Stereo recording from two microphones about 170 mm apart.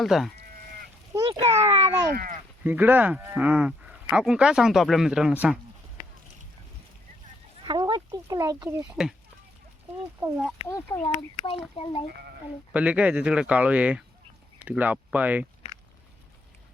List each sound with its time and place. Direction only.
0.0 s speech: centre (ahead or behind)
1.1 s a sound: 30° right (ahead or behind)
2.1 s speech: 55° right (ahead or behind)
2.6 s speech: 10° right (ahead or behind)
7.6 s a sound: 30° right (ahead or behind)
8.1 s speech: 20° right (ahead or behind)
10.2 s speech: 15° right (ahead or behind)
10.7 s speech: 20° left (ahead or behind)
11.0 s speech: 35° left (ahead or behind)
12.7 s speech: 10° right (ahead or behind)